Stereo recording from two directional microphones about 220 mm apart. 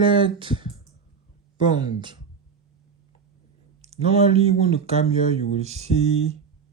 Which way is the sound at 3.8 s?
30° right (ahead or behind).